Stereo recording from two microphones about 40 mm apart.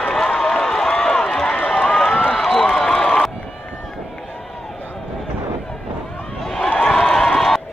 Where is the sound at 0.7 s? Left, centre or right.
Centre.